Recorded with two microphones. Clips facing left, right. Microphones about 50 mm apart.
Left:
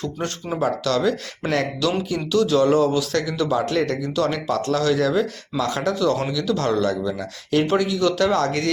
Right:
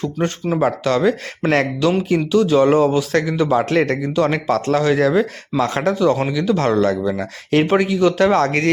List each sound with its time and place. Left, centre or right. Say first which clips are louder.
0.2 s speech: right 10 dB; centre
0.6 s speech: right 3 dB; right
2.0 s speech: right 5 dB; right
2.8 s speech: right 4 dB; right
3.5 s a man's voice: right 5 dB; right
4.4 s a man's voice: right 4 dB; right
4.8 s speech: right 3 dB; right